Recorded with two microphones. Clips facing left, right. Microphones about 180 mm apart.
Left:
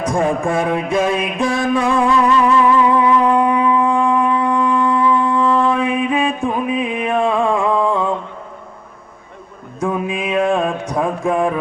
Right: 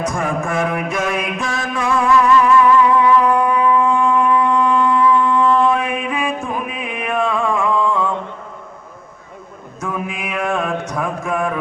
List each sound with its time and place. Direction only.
0.0 s music: 30° left (ahead or behind)
9.8 s mantra: 30° left (ahead or behind)